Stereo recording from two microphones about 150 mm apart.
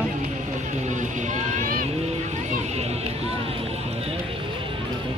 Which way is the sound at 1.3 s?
55° right (ahead or behind).